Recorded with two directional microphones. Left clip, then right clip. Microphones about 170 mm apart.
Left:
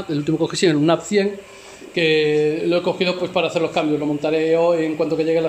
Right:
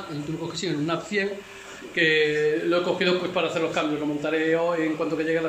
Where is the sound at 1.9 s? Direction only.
20° left (ahead or behind).